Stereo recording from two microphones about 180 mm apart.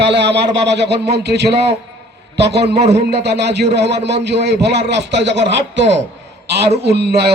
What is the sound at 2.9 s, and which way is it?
A man's voice, 65° right (ahead or behind).